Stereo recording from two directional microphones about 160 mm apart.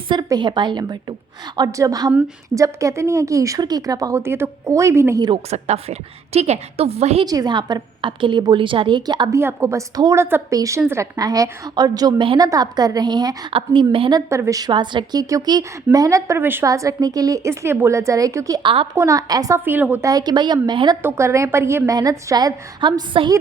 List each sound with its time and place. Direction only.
0.1 s a woman's voice: 25° right (ahead or behind)
5.5 s a woman's voice: 40° right (ahead or behind)
7.3 s a woman's voice: 25° right (ahead or behind)
9.4 s a woman's voice: 15° right (ahead or behind); by 18.9 s 30° right (ahead or behind)
18.9 s a woman's voice: 20° right (ahead or behind)
20.1 s a woman's voice: 25° right (ahead or behind)
21.0 s a woman's voice: 15° right (ahead or behind)